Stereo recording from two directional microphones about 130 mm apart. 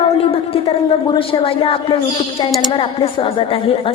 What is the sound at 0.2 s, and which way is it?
A woman's voice, 45° left (ahead or behind).